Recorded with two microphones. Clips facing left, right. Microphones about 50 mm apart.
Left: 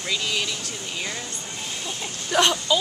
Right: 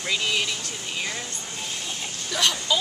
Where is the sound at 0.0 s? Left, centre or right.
Centre.